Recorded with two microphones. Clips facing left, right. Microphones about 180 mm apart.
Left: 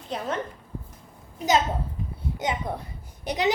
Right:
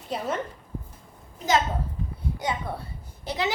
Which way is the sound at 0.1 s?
5° right (ahead or behind).